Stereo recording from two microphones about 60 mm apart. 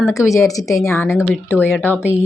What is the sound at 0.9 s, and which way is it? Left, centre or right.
A woman's voice, left.